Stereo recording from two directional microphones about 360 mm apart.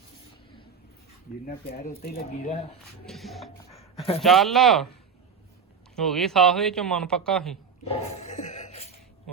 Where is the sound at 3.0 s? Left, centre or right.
Centre.